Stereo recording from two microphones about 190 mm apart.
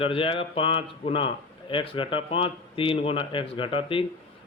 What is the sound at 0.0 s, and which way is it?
Speech, 30° left (ahead or behind).